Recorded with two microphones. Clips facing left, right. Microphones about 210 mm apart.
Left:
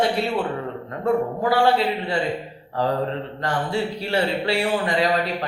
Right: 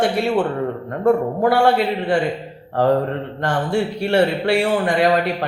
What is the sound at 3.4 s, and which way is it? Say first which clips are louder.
Speech: right 4 dB; 55° right (ahead or behind).